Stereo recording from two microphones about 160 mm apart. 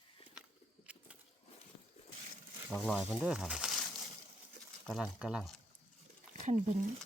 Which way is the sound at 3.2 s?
5° right (ahead or behind).